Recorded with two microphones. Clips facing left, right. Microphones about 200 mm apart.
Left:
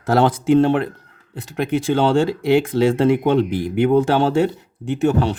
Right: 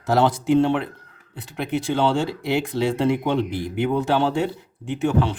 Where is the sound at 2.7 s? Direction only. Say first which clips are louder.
Left 5 dB; 50° left (ahead or behind).